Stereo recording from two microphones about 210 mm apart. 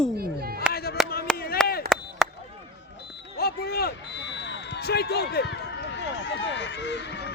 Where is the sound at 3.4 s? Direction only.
45° left (ahead or behind).